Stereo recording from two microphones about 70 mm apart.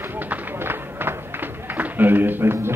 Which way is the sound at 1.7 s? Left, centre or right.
Right.